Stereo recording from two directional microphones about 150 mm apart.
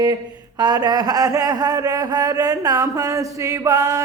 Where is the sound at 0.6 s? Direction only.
25° right (ahead or behind).